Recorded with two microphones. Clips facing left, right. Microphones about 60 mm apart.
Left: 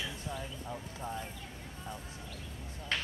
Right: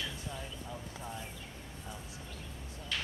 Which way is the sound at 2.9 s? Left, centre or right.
Left.